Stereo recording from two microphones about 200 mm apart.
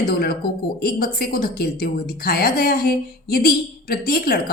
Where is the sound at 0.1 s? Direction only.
50° left (ahead or behind).